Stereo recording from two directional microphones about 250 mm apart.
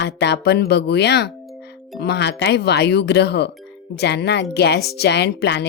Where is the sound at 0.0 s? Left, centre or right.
Left.